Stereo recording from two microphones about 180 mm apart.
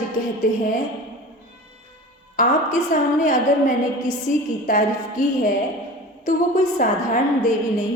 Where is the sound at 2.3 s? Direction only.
45° left (ahead or behind).